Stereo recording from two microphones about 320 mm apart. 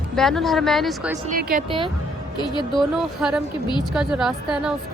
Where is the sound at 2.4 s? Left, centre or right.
Centre.